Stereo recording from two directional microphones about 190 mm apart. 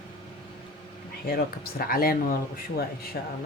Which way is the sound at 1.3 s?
55° left (ahead or behind).